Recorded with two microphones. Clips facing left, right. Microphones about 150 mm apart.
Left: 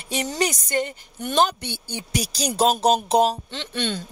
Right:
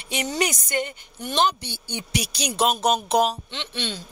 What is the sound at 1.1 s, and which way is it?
Speech, 50° left (ahead or behind).